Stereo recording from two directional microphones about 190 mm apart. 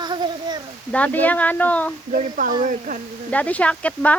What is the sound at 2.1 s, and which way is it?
Speech, 45° right (ahead or behind).